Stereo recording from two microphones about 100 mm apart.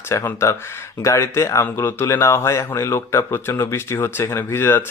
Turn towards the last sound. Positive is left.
turn(degrees=25)  # may be behind; listen again after turning